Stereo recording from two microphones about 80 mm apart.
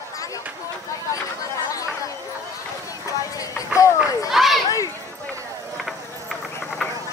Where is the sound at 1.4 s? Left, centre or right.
Left.